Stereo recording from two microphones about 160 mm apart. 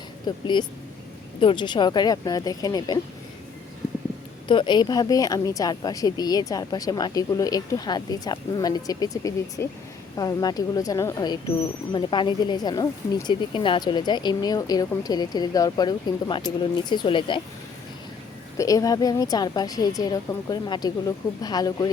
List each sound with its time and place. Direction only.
0.3 s a woman's voice: 30° left (ahead or behind)
4.4 s a woman's voice: 30° left (ahead or behind)
18.5 s a woman's voice: 20° left (ahead or behind)